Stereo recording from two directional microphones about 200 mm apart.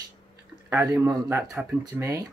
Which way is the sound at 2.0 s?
15° right (ahead or behind).